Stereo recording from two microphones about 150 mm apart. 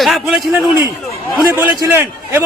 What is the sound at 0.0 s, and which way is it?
Speech, centre (ahead or behind).